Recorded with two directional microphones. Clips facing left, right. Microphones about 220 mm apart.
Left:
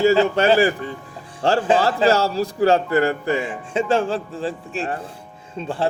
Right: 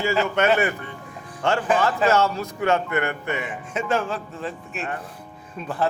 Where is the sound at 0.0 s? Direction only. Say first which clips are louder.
Left 6 dB; 35° left (ahead or behind).